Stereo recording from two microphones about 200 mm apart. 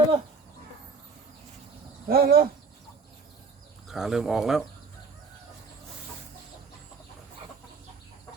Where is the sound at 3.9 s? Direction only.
Centre (ahead or behind).